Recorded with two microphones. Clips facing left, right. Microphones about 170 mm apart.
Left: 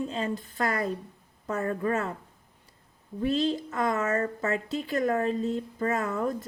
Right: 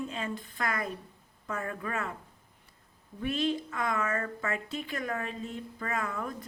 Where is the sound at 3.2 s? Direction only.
35° left (ahead or behind).